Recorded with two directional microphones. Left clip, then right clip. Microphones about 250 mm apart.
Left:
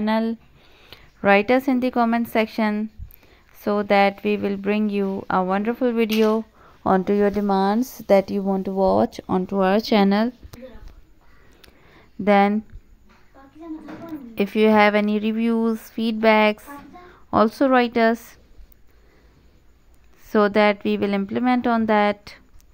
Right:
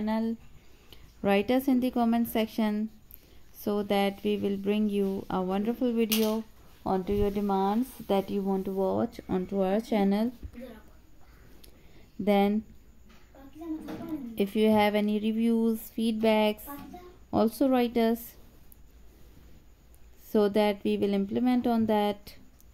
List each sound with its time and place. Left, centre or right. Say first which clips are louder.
0.0 s speech: left 9 dB; centre
6.2 s a sound: left 10 dB; left
6.9 s speech: left 9 dB; left
12.3 s speech: left 9 dB; left
14.3 s speech: left 8 dB; centre
20.2 s speech: left 8 dB; centre